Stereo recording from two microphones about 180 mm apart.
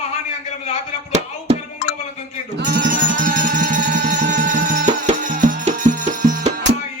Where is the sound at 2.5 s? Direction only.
70° right (ahead or behind).